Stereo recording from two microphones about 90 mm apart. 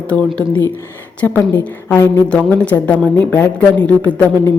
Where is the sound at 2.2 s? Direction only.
15° left (ahead or behind).